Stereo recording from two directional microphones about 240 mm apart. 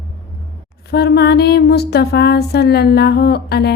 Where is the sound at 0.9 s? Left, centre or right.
Left.